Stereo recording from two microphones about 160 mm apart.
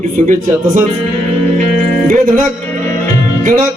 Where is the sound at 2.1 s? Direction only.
55° right (ahead or behind).